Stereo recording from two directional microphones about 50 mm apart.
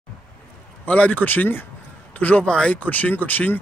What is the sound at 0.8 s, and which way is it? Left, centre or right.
Speech, left.